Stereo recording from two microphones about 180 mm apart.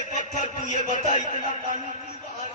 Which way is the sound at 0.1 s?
40° left (ahead or behind).